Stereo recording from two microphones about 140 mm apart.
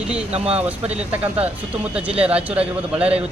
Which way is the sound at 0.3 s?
45° right (ahead or behind).